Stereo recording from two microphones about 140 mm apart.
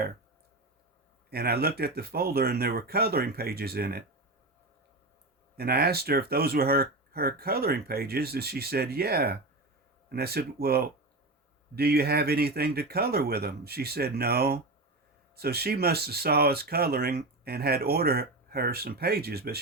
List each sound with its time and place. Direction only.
1.3 s speech: 90° right
5.5 s speech: 90° right